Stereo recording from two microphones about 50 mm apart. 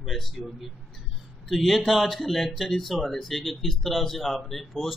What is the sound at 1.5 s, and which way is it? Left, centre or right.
Speech, centre.